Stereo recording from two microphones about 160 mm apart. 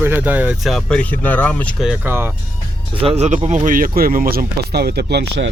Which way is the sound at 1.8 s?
10° right (ahead or behind).